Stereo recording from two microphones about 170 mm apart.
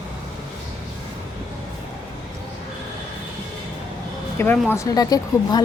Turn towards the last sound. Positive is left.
turn(degrees=20)  # may be behind; listen again after turning